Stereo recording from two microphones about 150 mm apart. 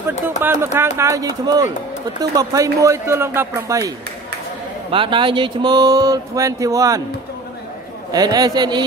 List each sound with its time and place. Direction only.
0.4 s speech: 15° right (ahead or behind)
4.9 s speech: 35° right (ahead or behind)
8.1 s speech: 25° right (ahead or behind)